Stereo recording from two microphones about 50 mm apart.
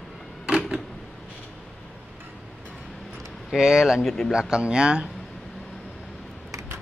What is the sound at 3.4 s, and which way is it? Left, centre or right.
Speech, centre.